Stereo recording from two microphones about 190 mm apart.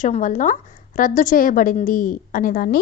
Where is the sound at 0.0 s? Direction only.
40° left (ahead or behind).